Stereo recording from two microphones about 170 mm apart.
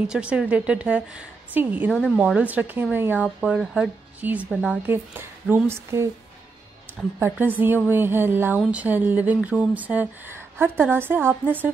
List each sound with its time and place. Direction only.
0.1 s speech: 5° right (ahead or behind)
1.9 s speech: 5° left (ahead or behind)
2.1 s speech: 10° right (ahead or behind)